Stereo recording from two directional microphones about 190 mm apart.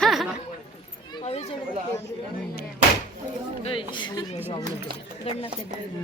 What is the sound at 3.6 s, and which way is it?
Speech, 25° left (ahead or behind).